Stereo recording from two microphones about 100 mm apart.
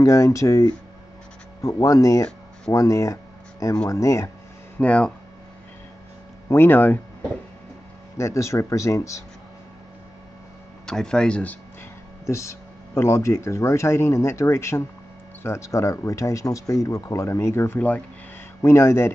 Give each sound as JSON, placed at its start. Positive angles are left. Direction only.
{"t": 0.0, "sound": "speech", "side_deg": 30}
{"t": 4.7, "sound": "speech", "side_deg": 10}
{"t": 6.5, "sound": "speech", "side_deg": 20}
{"t": 8.2, "sound": "speech", "side_deg": 30}
{"t": 10.9, "sound": "speech", "side_deg": 5}
{"t": 12.3, "sound": "speech", "side_deg": 30}
{"t": 17.7, "sound": "speech", "side_deg": 15}
{"t": 18.6, "sound": "speech", "side_deg": 25}